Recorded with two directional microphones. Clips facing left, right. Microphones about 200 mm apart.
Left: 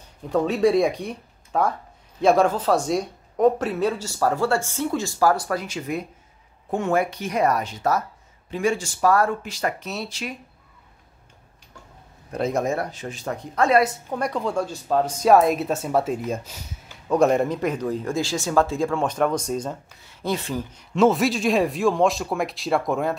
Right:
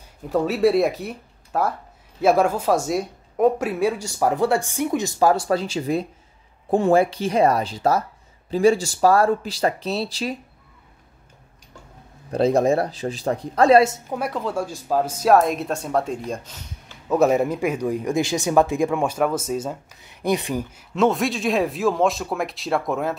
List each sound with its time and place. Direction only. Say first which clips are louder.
0.3 s a woman's voice: right 1 dB; 5° right (ahead or behind); by 10.3 s 35° right (ahead or behind)
12.3 s speech: right 6 dB; 30° right (ahead or behind)
14.0 s speech: even; 5° right (ahead or behind)
17.1 s a woman's voice: right 1 dB; 5° right (ahead or behind)
20.1 s a woman's voice: right 4 dB; 15° right (ahead or behind)
20.9 s speech: left 2 dB; centre (ahead or behind)